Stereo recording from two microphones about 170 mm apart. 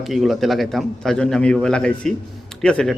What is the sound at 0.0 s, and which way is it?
A man's voice, centre (ahead or behind).